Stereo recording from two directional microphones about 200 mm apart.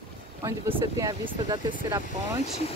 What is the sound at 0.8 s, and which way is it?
Speech, 20° right (ahead or behind).